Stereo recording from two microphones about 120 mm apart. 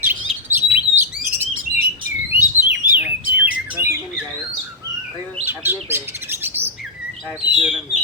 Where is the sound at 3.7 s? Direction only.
20° right (ahead or behind).